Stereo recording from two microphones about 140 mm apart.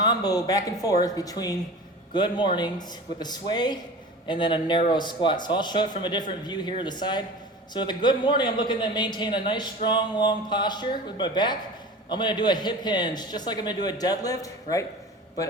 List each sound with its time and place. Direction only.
0.0 s speech: 30° left (ahead or behind)